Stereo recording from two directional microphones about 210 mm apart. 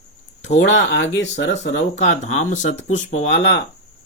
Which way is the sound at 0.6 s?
60° left (ahead or behind).